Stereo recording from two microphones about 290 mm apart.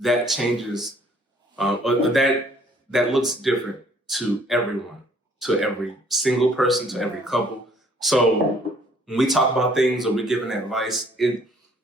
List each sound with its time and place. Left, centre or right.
0.0 s speech: centre